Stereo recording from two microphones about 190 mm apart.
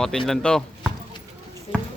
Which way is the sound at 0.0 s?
5° left (ahead or behind).